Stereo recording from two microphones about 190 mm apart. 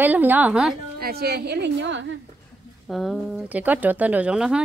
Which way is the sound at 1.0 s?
55° right (ahead or behind).